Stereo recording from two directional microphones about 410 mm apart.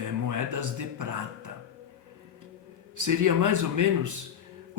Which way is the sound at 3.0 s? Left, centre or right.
Right.